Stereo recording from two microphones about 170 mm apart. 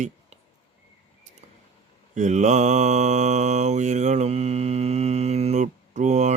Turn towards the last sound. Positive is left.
turn(degrees=-45)  # may be behind; listen again after turning